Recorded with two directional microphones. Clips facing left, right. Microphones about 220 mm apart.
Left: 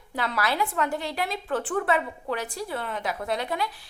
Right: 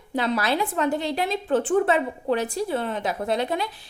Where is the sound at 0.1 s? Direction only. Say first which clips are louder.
Right 5 dB; 20° right (ahead or behind).